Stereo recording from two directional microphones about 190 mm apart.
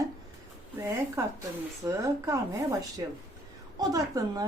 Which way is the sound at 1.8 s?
15° right (ahead or behind).